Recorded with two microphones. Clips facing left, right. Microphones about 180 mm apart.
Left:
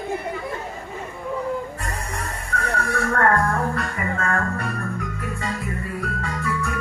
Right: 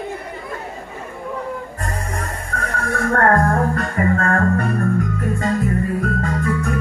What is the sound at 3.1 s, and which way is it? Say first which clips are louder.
Music: right 5 dB; 45° right (ahead or behind).